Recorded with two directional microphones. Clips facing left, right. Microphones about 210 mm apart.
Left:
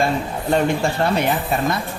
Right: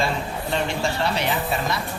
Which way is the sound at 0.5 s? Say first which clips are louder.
Left 6 dB; 50° left (ahead or behind).